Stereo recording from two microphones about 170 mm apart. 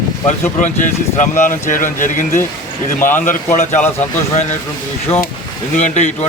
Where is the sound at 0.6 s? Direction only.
45° left (ahead or behind).